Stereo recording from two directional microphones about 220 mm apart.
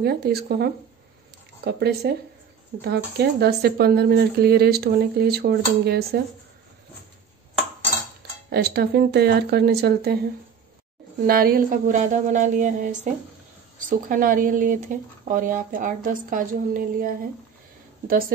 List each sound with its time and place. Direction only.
0.0 s speech: 45° right (ahead or behind)
8.5 s speech: 45° right (ahead or behind)
11.2 s speech: 40° right (ahead or behind)